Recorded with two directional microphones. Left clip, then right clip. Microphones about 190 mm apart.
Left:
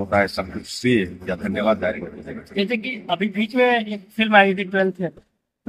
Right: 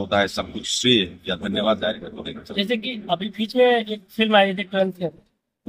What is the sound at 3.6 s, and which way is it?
Speech, 35° right (ahead or behind).